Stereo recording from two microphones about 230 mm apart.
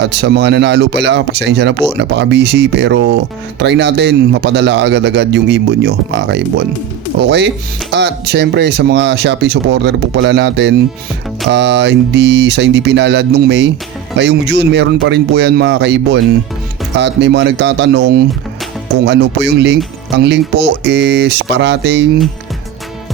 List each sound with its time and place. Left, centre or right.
0.0 s speech: right